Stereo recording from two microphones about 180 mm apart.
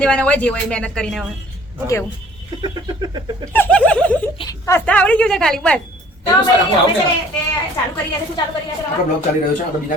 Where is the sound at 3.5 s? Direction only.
10° left (ahead or behind).